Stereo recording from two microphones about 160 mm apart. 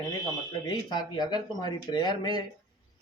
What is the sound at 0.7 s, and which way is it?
A man's voice, 25° left (ahead or behind).